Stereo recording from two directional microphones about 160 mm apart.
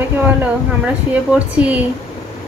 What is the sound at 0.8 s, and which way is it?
Speech, 10° right (ahead or behind).